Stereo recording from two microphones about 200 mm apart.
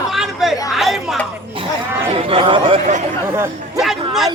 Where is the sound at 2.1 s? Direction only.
25° right (ahead or behind).